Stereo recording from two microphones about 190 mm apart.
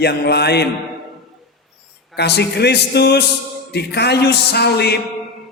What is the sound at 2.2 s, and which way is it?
Music, 60° left (ahead or behind).